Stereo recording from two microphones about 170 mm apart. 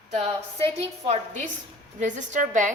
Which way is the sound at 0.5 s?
35° right (ahead or behind).